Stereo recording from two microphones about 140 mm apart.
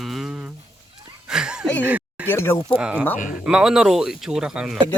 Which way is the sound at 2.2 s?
15° left (ahead or behind).